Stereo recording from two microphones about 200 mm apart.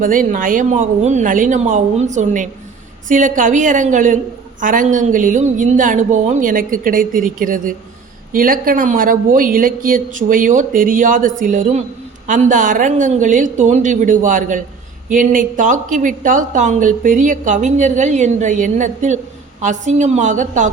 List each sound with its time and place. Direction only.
0.0 s a woman's voice: 40° right (ahead or behind)